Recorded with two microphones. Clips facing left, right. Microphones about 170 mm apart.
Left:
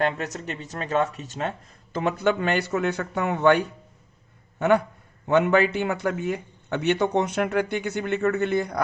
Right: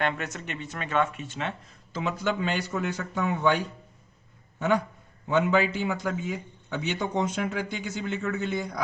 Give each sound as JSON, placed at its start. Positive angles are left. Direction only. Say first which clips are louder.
{"t": 0.0, "sound": "speech", "louder": "left 4 dB", "side_deg": 35}
{"t": 5.3, "sound": "a man's voice", "louder": "left 4 dB", "side_deg": 60}